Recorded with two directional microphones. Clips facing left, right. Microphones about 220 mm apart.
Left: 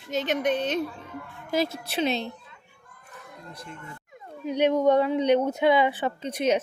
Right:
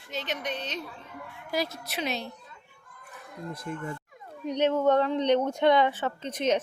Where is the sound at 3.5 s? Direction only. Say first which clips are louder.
Right 7 dB; 50° right (ahead or behind).